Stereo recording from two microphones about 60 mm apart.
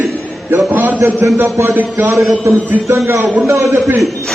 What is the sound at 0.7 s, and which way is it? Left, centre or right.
Speech, right.